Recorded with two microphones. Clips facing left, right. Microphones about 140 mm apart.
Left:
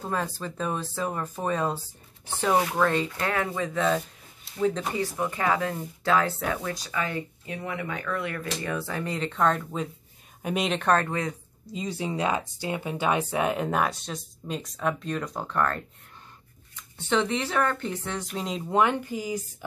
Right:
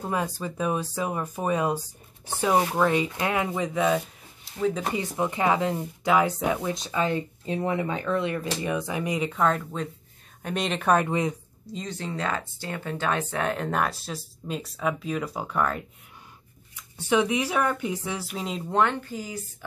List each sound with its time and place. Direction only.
0.0 s speech: 15° right (ahead or behind)
4.9 s speech: 20° right (ahead or behind)
11.6 s speech: 5° left (ahead or behind)